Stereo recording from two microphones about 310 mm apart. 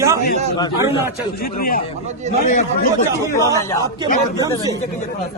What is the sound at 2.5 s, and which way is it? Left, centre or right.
Speech, left.